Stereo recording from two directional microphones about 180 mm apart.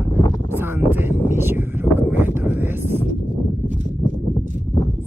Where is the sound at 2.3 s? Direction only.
10° right (ahead or behind).